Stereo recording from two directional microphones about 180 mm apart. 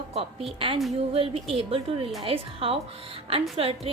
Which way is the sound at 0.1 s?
35° right (ahead or behind).